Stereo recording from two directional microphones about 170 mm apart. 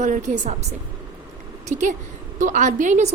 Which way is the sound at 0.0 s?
45° right (ahead or behind).